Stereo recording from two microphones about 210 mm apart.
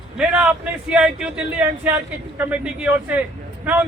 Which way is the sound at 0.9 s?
5° right (ahead or behind).